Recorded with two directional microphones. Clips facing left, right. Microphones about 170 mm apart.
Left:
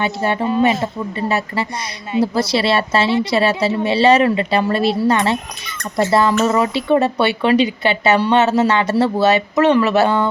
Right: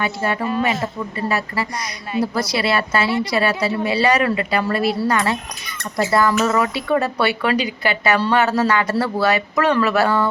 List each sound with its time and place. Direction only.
0.0 s speech: 25° left (ahead or behind)